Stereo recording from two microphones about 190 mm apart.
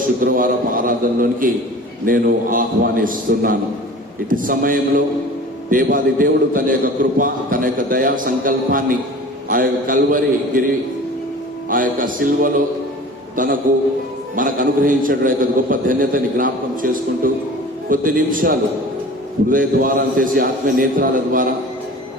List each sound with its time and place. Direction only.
0.0 s a man's voice: 45° right (ahead or behind)
11.7 s a man's voice: 45° right (ahead or behind)